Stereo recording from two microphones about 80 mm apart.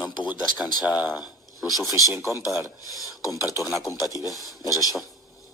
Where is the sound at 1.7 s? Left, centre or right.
Left.